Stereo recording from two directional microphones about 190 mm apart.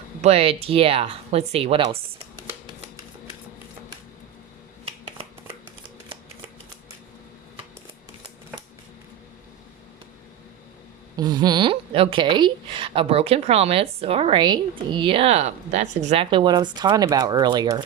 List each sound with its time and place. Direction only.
0.2 s speech: 30° right (ahead or behind)
11.2 s speech: 20° right (ahead or behind)